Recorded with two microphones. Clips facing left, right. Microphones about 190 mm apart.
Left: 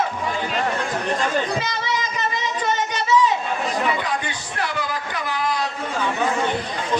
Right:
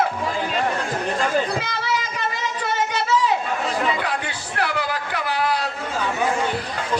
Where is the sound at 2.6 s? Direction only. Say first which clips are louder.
Right 1 dB; 65° right (ahead or behind).